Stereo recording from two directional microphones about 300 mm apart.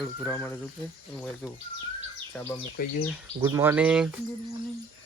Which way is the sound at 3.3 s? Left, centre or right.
Centre.